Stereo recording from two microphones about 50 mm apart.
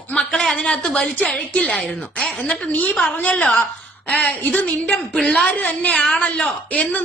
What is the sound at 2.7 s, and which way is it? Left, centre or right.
A man's voice, left.